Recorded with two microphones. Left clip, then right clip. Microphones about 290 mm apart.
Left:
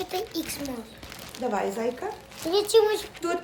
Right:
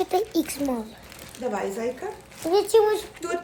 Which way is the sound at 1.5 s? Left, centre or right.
Centre.